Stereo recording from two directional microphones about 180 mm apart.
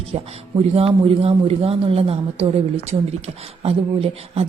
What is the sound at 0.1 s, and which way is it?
Speech, 35° right (ahead or behind).